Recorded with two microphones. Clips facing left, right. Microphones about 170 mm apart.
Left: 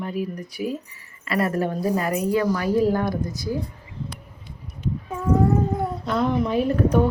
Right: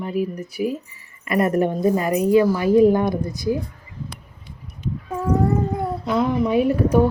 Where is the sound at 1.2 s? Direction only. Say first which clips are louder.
Right 4 dB; 20° right (ahead or behind).